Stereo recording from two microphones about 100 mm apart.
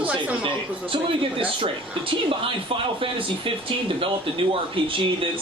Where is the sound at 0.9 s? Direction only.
60° right (ahead or behind).